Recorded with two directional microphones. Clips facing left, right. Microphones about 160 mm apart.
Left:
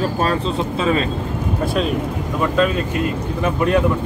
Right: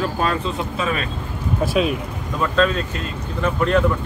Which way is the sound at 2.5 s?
10° left (ahead or behind).